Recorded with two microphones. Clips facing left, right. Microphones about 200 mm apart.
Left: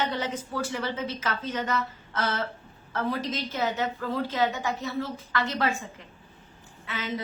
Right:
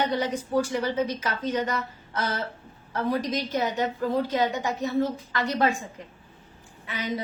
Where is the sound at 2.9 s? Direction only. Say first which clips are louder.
Right 3 dB; 40° right (ahead or behind).